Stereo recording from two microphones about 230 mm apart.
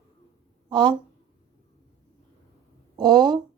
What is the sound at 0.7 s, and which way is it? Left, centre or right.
Speech, centre.